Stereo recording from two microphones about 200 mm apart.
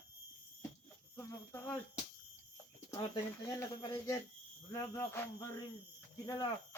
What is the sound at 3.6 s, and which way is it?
Speech, 15° left (ahead or behind).